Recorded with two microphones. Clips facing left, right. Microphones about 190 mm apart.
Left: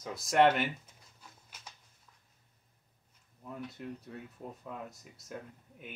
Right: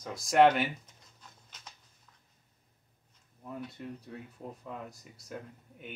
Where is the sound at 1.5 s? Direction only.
10° left (ahead or behind).